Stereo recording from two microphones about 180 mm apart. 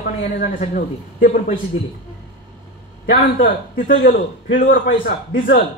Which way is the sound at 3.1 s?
50° left (ahead or behind).